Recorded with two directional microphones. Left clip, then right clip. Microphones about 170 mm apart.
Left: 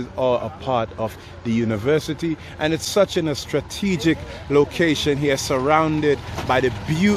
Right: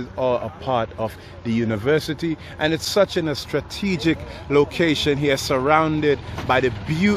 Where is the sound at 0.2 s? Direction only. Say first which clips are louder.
Left 1 dB; 10° left (ahead or behind).